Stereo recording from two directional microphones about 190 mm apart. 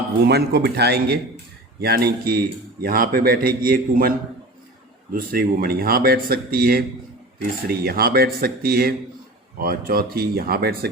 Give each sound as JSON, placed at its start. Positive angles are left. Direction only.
{"t": 0.3, "sound": "speech", "side_deg": -60}
{"t": 5.1, "sound": "speech", "side_deg": -50}